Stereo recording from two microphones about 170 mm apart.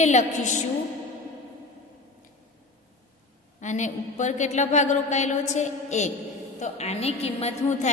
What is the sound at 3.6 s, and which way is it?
A woman's voice, 45° left (ahead or behind).